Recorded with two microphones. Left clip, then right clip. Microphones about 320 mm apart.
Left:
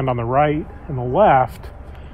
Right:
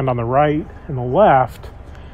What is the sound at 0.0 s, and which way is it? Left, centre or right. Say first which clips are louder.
Speech: right 1 dB; right.